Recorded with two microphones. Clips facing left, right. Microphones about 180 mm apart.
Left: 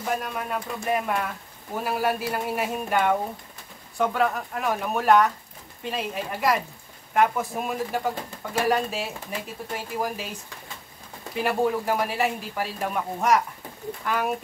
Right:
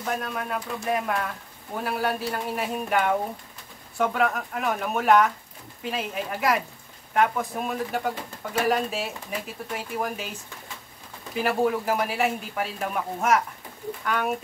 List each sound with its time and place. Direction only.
0.0 s speech: centre (ahead or behind)